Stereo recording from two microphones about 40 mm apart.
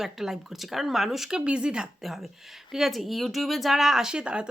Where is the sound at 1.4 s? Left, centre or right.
Right.